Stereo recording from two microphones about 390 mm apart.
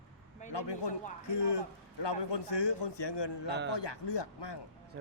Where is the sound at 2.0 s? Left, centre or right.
Left.